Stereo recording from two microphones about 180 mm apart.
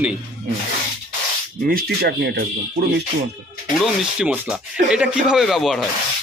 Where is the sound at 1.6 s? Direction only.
55° right (ahead or behind).